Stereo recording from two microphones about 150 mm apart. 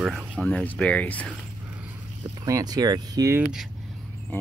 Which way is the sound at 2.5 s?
25° right (ahead or behind).